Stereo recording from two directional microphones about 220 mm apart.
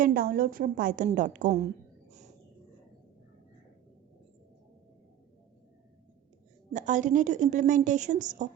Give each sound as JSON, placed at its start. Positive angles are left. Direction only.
{"t": 0.0, "sound": "a woman's voice", "side_deg": -40}
{"t": 2.0, "sound": "a sound", "side_deg": -30}
{"t": 6.7, "sound": "a woman's voice", "side_deg": -35}